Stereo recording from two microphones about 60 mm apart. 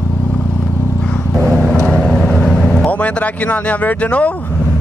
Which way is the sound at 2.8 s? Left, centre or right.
Left.